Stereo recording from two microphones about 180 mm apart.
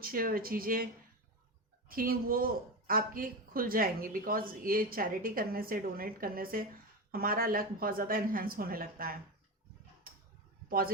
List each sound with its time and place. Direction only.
0.0 s speech: 55° right (ahead or behind)
1.9 s speech: 55° right (ahead or behind)
10.7 s a man's voice: 55° right (ahead or behind)